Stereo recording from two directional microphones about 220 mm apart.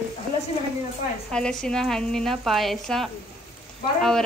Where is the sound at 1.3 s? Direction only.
5° left (ahead or behind).